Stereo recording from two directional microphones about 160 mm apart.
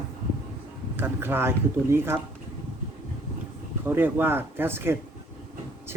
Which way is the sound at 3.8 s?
15° right (ahead or behind).